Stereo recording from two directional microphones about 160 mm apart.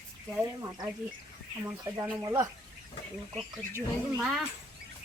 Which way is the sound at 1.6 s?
20° right (ahead or behind).